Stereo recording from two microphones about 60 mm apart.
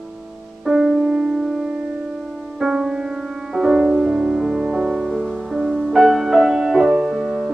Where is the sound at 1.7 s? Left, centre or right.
Right.